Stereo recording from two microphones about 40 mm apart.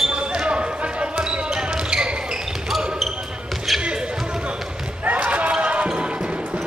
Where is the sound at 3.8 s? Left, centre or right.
Right.